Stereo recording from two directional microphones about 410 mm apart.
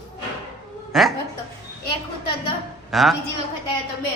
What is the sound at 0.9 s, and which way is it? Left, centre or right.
Speech, centre.